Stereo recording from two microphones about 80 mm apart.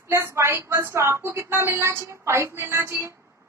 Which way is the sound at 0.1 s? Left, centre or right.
Right.